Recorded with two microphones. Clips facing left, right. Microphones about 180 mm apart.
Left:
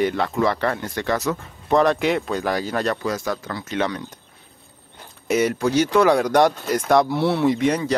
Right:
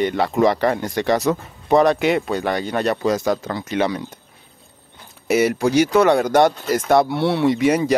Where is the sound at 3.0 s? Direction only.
20° right (ahead or behind).